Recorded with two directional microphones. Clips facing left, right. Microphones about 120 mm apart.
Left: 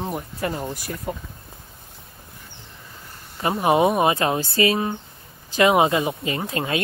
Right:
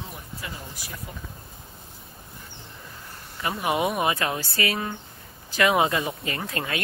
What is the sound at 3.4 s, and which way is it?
Speech, 25° left (ahead or behind).